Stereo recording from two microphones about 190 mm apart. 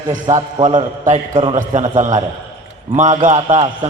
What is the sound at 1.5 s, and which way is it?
A man's voice, 40° right (ahead or behind).